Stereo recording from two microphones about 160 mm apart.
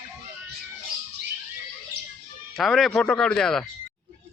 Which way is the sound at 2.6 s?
Centre (ahead or behind).